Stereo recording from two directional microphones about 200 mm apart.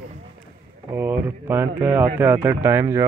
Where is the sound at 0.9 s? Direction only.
10° right (ahead or behind).